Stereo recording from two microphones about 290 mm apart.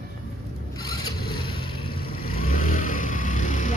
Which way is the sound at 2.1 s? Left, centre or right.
Left.